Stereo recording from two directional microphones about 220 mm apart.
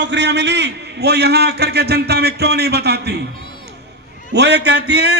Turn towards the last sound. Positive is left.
turn(degrees=-50)  # may be behind; listen again after turning